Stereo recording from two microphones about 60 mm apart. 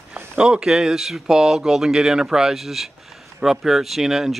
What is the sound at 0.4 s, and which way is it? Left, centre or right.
Speech, centre.